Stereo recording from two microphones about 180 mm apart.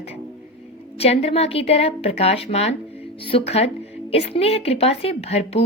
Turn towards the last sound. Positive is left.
turn(degrees=35)  # may be behind; listen again after turning